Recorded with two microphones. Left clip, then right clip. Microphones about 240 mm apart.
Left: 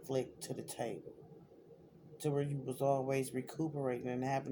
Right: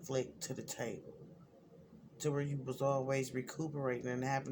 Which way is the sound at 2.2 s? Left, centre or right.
Right.